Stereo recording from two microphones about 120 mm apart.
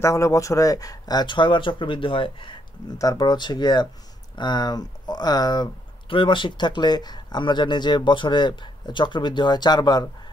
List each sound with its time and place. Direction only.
0.0 s speech: 25° left (ahead or behind); by 2.5 s 45° left (ahead or behind)
3.0 s speech: 35° left (ahead or behind)